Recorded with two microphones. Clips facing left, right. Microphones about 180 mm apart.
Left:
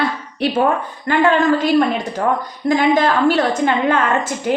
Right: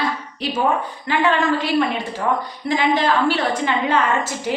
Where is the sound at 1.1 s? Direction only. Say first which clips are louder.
Left 4 dB; 45° left (ahead or behind).